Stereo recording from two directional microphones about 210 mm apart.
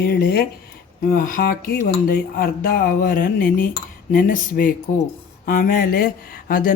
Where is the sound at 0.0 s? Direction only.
45° left (ahead or behind).